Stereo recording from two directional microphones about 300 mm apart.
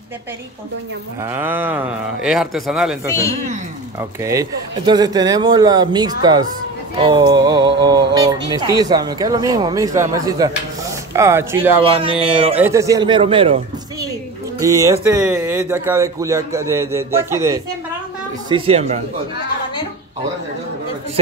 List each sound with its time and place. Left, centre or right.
1.3 s speech: centre
3.1 s speech: centre
4.2 s speech: centre
12.3 s speech: centre
12.5 s speech: centre
14.6 s speech: centre
18.5 s speech: centre